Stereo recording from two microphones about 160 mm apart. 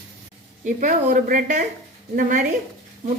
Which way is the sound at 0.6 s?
55° right (ahead or behind).